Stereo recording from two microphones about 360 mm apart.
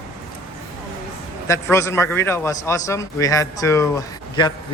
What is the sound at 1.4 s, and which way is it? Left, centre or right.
A man's voice, centre.